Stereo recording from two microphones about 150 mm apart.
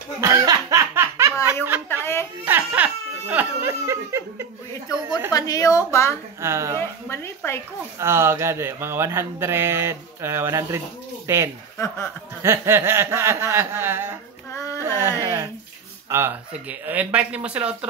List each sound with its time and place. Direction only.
0.2 s snicker: 20° right (ahead or behind)
2.4 s crying: 10° right (ahead or behind)
5.3 s a sound: 25° left (ahead or behind)
6.4 s speech: 20° right (ahead or behind)
6.8 s speech: 15° left (ahead or behind)
8.0 s speech: 15° right (ahead or behind)
14.5 s a sound: 20° left (ahead or behind)
14.8 s a sound: 15° right (ahead or behind)
16.1 s speech: 15° right (ahead or behind)